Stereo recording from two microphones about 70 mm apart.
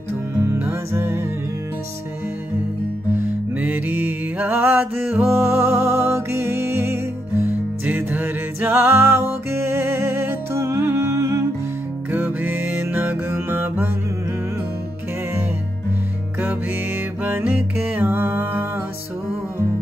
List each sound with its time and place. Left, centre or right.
0.4 s music: right
3.5 s music: right
7.8 s music: right
10.9 s humming: right
12.1 s music: right
17.2 s music: right